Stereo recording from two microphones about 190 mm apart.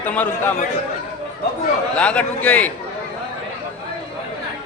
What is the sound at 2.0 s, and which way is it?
Speech, 5° left (ahead or behind).